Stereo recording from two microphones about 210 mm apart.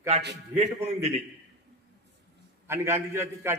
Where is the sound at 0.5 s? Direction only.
30° right (ahead or behind).